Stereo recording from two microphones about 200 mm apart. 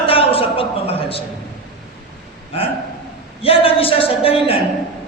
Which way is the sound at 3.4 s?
30° left (ahead or behind).